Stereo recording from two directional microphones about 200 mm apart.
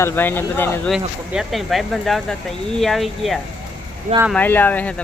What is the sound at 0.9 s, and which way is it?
Speech, centre (ahead or behind).